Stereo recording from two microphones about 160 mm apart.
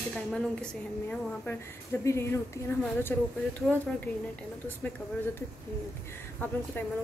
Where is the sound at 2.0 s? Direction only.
20° left (ahead or behind).